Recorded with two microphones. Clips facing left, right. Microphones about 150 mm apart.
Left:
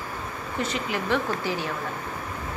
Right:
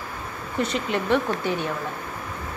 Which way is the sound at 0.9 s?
20° right (ahead or behind).